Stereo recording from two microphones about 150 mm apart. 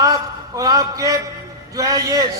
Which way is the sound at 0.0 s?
25° right (ahead or behind).